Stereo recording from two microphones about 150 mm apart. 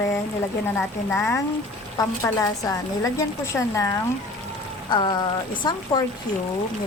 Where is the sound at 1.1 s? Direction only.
15° left (ahead or behind).